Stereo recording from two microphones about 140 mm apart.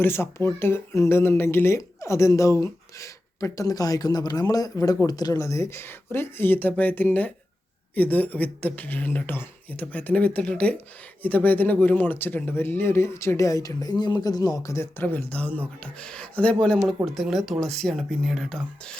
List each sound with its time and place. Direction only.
0.0 s speech: 15° left (ahead or behind); by 18.6 s centre (ahead or behind)